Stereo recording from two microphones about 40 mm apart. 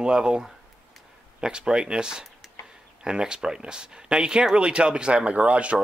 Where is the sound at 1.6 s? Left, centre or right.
Centre.